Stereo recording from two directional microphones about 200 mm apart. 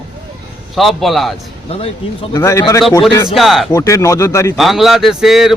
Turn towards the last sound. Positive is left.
turn(degrees=0)  # may be behind; listen again after turning